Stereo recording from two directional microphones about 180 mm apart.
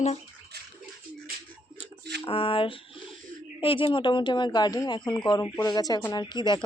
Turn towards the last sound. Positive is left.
turn(degrees=25)  # may be behind; listen again after turning